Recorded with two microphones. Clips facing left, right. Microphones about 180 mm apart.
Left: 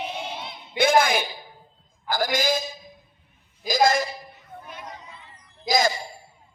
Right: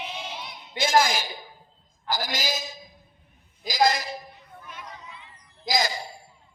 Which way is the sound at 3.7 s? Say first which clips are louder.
Left 3 dB; 50° left (ahead or behind).